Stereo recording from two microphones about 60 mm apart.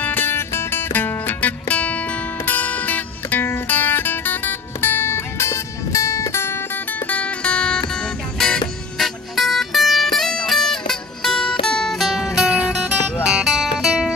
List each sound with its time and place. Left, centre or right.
0.0 s music: left
7.1 s music: left; by 12.5 s centre
12.5 s music: centre